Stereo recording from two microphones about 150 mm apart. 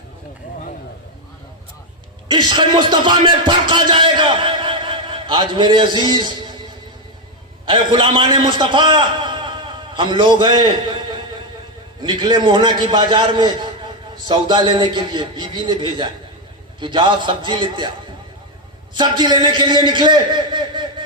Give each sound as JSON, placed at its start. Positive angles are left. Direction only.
{"t": 2.2, "sound": "speech", "side_deg": -30}
{"t": 7.7, "sound": "a man's voice", "side_deg": -35}
{"t": 18.9, "sound": "a man's voice", "side_deg": -30}